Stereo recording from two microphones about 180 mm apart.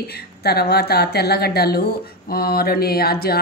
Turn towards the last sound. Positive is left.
turn(degrees=60)  # may be behind; listen again after turning